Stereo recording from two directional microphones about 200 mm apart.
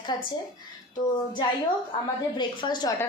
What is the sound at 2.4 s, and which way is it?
Speech, 20° left (ahead or behind).